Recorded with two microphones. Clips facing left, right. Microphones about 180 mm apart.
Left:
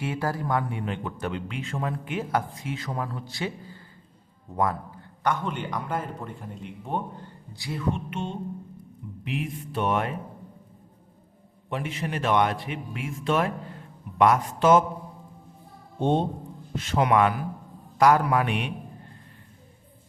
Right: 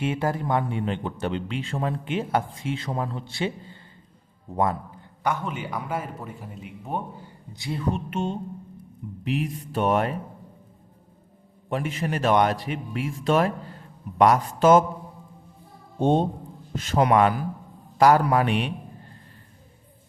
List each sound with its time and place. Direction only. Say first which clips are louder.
0.0 s speech: right 3 dB; 25° right (ahead or behind)
5.2 s a man's voice: even; 5° right (ahead or behind)
7.8 s a man's voice: right 2 dB; 40° right (ahead or behind)
11.7 s a man's voice: right 3 dB; 45° right (ahead or behind)
16.0 s a man's voice: right 3 dB; 45° right (ahead or behind)